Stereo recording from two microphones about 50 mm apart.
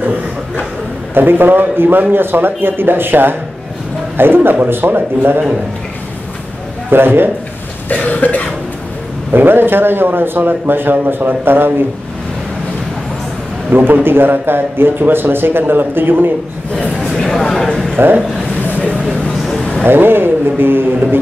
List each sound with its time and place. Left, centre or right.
1.1 s speech: right
6.9 s speech: right
7.9 s cough: left
9.3 s speech: right
13.7 s speech: right
16.7 s speech: left
17.1 s a sound: centre
17.9 s speech: right
18.6 s a sound: left
19.8 s speech: right